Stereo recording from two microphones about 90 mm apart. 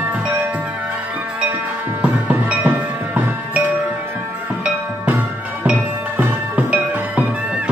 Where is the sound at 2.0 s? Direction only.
15° right (ahead or behind).